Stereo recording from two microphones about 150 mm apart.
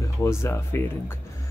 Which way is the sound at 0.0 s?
20° left (ahead or behind).